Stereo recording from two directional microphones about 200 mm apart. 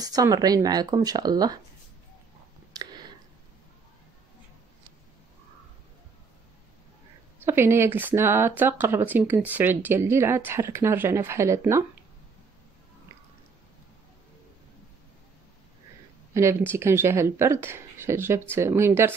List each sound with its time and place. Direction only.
0.0 s speech: 20° right (ahead or behind)
2.7 s a sound: 20° right (ahead or behind)
7.4 s speech: 10° right (ahead or behind)
16.3 s speech: 15° right (ahead or behind)